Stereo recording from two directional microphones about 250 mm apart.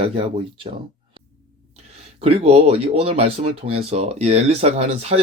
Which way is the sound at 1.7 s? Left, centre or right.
Right.